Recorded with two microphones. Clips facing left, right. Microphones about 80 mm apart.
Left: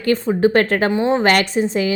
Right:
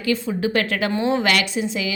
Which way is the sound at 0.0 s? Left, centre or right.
Left.